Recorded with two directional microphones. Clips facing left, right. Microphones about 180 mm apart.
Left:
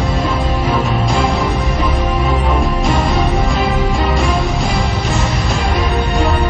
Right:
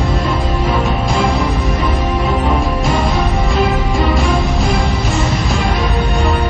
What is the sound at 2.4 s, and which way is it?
Music, centre (ahead or behind).